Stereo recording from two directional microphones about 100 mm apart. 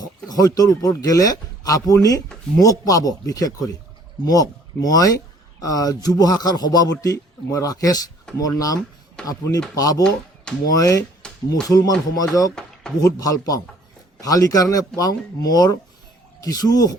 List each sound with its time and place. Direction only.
0.0 s speech: 40° left (ahead or behind)
11.2 s a sound: 5° left (ahead or behind)
11.7 s speech: 40° left (ahead or behind)